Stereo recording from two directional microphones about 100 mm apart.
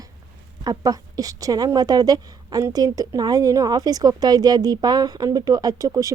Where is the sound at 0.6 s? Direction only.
40° right (ahead or behind).